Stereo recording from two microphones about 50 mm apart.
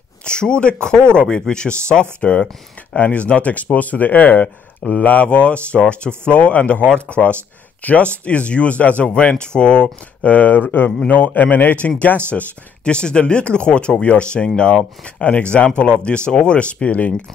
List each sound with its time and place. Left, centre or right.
0.2 s speech: centre